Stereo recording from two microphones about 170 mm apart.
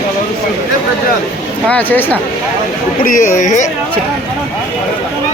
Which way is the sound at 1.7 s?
10° left (ahead or behind).